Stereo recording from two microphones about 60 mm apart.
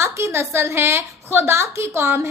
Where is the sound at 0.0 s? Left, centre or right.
Right.